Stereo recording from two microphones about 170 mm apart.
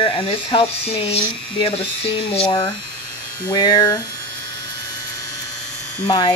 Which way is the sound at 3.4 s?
25° left (ahead or behind).